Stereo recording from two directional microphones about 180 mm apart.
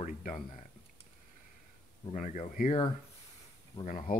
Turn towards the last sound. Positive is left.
turn(degrees=45)  # may be behind; listen again after turning